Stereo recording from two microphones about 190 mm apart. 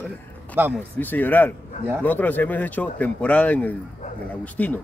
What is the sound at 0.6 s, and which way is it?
Speech, 10° right (ahead or behind).